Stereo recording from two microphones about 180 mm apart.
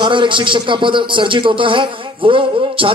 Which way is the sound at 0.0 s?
25° right (ahead or behind).